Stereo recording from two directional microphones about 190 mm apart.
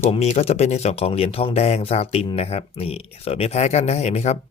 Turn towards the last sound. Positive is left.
turn(degrees=35)  # may be behind; listen again after turning